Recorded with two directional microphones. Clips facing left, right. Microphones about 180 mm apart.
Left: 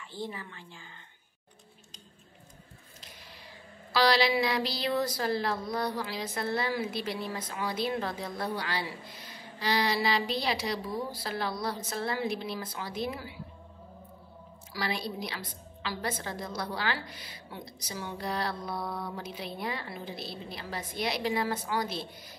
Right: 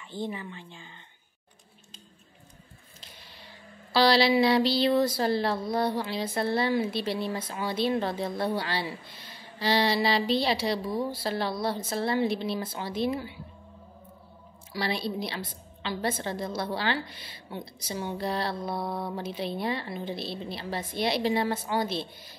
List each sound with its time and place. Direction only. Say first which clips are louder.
0.1 s speech: right 5 dB; 20° right (ahead or behind)
3.9 s speech: right 4 dB; 30° right (ahead or behind)
14.7 s speech: right 4 dB; 30° right (ahead or behind)